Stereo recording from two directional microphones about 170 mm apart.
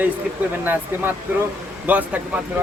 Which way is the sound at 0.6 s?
10° right (ahead or behind).